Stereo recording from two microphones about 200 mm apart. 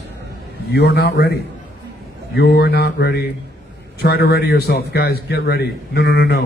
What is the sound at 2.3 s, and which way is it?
A man's voice, 55° left (ahead or behind).